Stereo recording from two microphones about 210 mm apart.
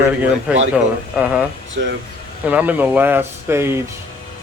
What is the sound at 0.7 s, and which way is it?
Speech, 5° right (ahead or behind).